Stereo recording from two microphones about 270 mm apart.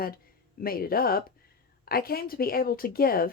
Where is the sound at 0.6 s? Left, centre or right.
Left.